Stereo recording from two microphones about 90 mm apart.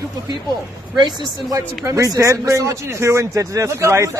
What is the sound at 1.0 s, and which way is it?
Speech, 40° right (ahead or behind).